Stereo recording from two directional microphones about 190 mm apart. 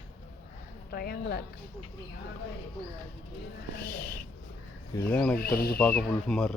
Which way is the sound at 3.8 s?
55° left (ahead or behind).